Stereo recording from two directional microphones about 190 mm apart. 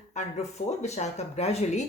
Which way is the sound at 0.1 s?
40° left (ahead or behind).